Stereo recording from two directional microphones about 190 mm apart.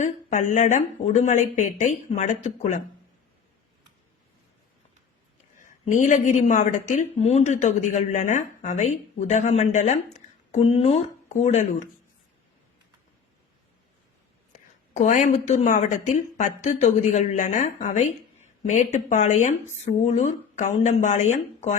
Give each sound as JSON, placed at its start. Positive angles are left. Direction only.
{"t": 0.0, "sound": "a woman's voice", "side_deg": 40}
{"t": 5.5, "sound": "a woman's voice", "side_deg": 40}
{"t": 14.5, "sound": "a woman's voice", "side_deg": 40}